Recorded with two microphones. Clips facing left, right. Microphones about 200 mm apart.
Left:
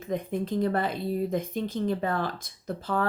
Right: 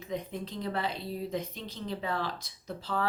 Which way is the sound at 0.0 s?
50° left (ahead or behind).